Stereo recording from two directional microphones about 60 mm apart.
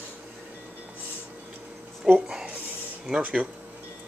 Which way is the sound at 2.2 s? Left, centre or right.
Centre.